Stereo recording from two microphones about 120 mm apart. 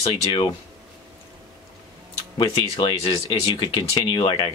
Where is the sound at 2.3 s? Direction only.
40° left (ahead or behind).